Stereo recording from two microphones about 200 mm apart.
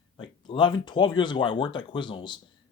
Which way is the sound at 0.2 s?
25° left (ahead or behind).